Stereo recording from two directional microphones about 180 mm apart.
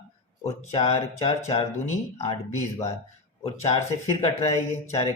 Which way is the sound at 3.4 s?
35° left (ahead or behind).